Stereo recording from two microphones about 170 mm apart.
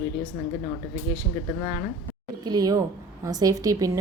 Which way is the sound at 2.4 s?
25° right (ahead or behind).